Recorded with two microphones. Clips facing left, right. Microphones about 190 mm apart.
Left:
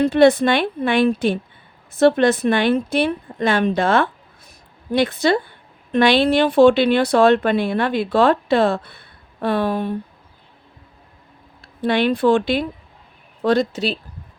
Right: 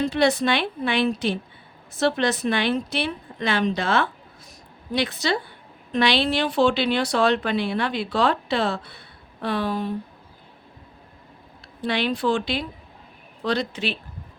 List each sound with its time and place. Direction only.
0.1 s speech: 55° left (ahead or behind)
11.8 s speech: 55° left (ahead or behind)